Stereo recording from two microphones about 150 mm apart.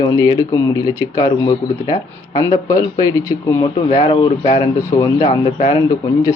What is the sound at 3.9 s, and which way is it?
Speech, 35° left (ahead or behind).